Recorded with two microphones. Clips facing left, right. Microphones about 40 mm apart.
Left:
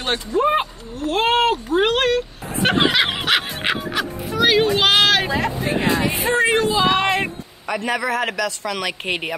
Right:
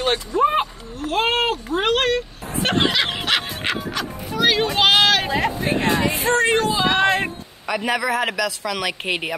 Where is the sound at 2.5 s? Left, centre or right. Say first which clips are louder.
Left 2 dB; centre.